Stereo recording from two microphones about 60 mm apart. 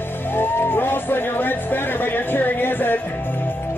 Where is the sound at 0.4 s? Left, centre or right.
Left.